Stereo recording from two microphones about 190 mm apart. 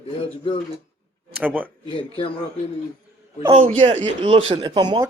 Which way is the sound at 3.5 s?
35° right (ahead or behind).